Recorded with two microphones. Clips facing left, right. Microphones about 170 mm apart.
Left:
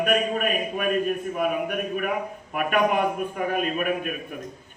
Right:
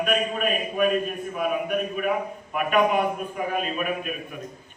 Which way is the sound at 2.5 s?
50° left (ahead or behind).